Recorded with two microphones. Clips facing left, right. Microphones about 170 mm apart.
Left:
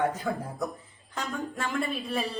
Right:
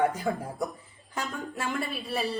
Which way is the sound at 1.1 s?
5° right (ahead or behind).